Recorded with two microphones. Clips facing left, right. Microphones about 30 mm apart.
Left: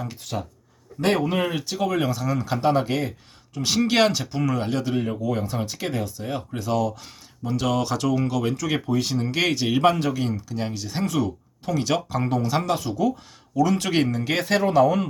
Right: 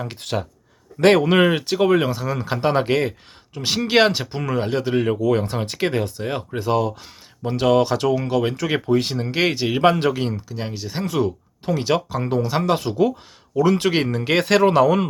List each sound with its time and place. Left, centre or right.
0.2 s speech: right
2.8 s speech: right
3.5 s speech: right
4.9 s speech: right
5.6 s speech: right
6.5 s speech: right
10.0 s speech: right
10.5 s speech: centre
11.2 s speech: right
12.0 s speech: centre
12.3 s speech: centre
12.7 s speech: right
14.2 s speech: right
14.4 s speech: right